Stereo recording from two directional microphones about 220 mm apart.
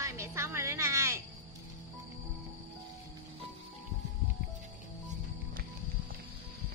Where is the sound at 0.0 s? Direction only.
10° right (ahead or behind).